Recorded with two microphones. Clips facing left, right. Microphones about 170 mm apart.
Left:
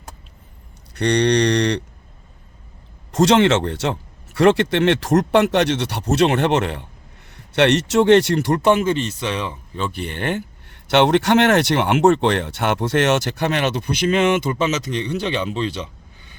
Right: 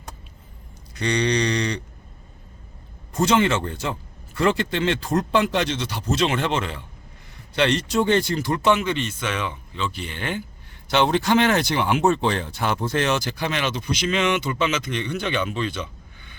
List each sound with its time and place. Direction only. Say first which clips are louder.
0.9 s speech: left 5 dB; 65° left (ahead or behind)
3.1 s speech: left 5 dB; 80° left; by 9.8 s 35° left (ahead or behind)
9.8 s speech: left 4 dB; 55° left (ahead or behind)
10.9 s speech: left 4 dB; 70° left (ahead or behind); by 15.9 s 35° left (ahead or behind)